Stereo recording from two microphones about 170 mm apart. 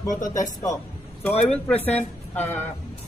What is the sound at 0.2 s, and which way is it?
Speech, 20° left (ahead or behind).